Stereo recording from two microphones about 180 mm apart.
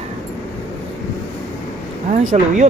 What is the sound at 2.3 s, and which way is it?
Speech, 40° right (ahead or behind).